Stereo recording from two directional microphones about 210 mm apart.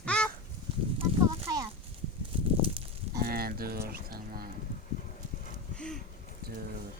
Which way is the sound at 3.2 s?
45° right (ahead or behind).